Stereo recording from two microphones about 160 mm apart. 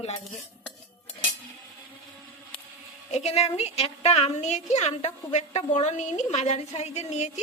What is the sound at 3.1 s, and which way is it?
A woman's voice, 40° left (ahead or behind).